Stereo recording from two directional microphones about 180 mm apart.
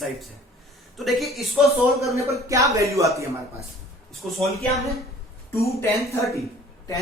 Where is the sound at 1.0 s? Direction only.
Centre (ahead or behind).